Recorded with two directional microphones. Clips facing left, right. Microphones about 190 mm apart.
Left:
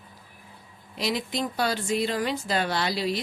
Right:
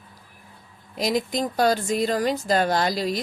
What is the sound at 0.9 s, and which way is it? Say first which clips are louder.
Speech: right 5 dB; 45° right (ahead or behind).